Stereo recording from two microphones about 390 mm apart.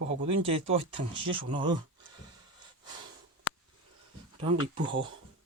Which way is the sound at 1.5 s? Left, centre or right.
Centre.